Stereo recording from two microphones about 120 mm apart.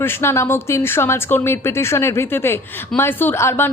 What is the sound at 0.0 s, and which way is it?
Speech, 20° left (ahead or behind).